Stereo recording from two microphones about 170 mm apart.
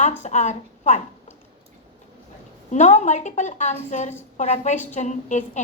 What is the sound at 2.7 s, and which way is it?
A woman's voice, 45° left (ahead or behind).